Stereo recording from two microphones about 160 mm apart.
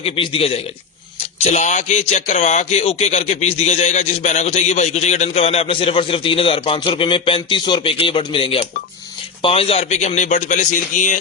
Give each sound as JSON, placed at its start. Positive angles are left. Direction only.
{"t": 0.0, "sound": "a man's voice", "side_deg": 35}